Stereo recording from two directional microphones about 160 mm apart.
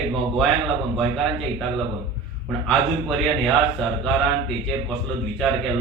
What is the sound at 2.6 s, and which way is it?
Speech, 5° left (ahead or behind).